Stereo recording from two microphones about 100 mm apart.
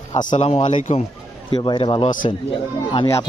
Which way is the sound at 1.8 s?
60° left (ahead or behind).